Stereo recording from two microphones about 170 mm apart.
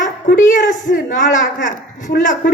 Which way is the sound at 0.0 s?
50° left (ahead or behind).